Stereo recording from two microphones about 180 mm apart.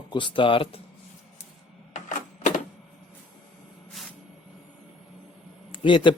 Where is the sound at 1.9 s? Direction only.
45° left (ahead or behind).